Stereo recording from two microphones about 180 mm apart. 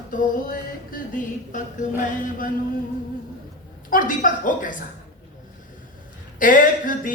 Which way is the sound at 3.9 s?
50° left (ahead or behind).